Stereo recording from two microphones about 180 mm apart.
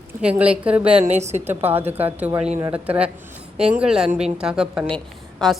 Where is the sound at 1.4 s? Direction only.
10° right (ahead or behind).